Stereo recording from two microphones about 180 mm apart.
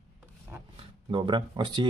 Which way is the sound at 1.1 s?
25° right (ahead or behind).